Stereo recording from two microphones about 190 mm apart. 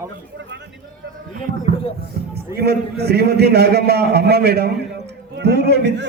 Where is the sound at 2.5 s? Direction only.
60° right (ahead or behind).